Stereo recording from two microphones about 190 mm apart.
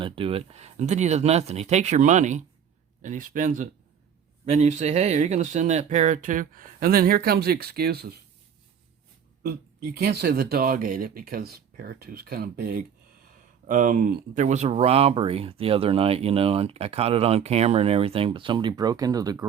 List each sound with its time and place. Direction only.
0.0 s speech: 30° right (ahead or behind); by 8.1 s 55° right (ahead or behind)
9.4 s speech: 55° right (ahead or behind); by 19.5 s 20° right (ahead or behind)